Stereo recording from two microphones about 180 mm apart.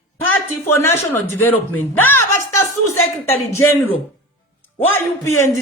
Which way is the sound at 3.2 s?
15° left (ahead or behind).